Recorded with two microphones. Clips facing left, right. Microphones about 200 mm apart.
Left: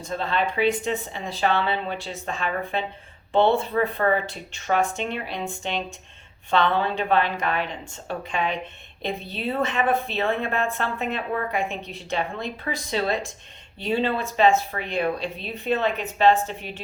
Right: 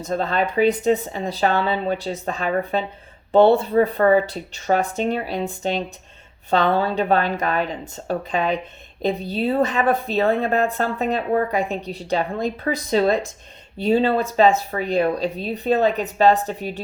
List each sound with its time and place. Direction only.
0.0 s speech: 40° right (ahead or behind)